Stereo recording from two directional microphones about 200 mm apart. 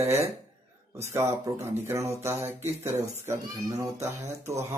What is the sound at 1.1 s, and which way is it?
Speech, 10° right (ahead or behind).